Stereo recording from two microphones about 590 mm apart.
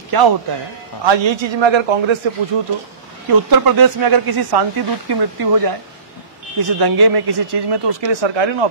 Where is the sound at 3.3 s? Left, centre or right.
Right.